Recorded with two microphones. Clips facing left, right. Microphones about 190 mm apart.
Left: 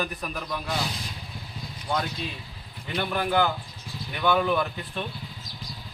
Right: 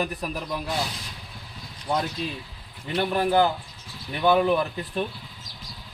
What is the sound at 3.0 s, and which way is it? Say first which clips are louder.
A man's voice: right 4 dB; 30° right (ahead or behind).